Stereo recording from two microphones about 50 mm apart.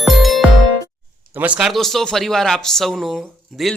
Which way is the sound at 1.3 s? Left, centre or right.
Right.